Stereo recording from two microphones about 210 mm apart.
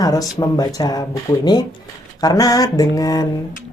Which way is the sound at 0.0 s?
15° left (ahead or behind).